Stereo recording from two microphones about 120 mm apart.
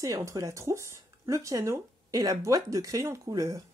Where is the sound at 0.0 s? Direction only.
30° right (ahead or behind).